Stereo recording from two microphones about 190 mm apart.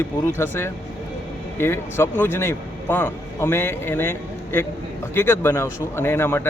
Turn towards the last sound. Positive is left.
turn(degrees=10)  # may be behind; listen again after turning